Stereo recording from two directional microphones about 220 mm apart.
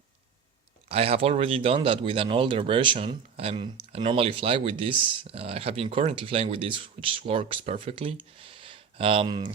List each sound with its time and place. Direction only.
0.9 s speech: 25° right (ahead or behind)